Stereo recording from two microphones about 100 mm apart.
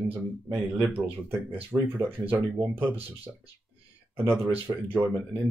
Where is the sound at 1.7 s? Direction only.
30° right (ahead or behind).